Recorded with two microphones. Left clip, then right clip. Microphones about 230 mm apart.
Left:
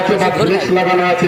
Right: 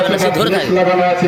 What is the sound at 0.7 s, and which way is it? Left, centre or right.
Speech, left.